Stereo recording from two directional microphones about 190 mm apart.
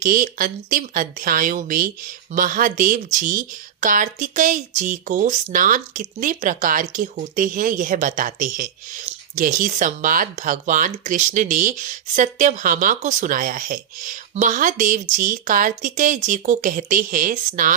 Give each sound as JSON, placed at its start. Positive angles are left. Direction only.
{"t": 0.0, "sound": "speech", "side_deg": -45}